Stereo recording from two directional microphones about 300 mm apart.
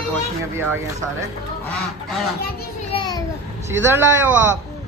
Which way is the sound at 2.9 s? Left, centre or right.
Centre.